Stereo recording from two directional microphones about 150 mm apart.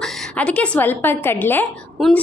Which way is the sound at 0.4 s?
10° left (ahead or behind).